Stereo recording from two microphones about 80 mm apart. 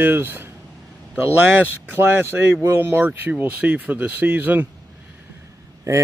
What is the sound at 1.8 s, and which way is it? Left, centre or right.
Speech, right.